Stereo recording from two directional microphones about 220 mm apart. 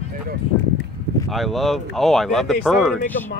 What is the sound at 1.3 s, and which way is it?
Speech, centre (ahead or behind).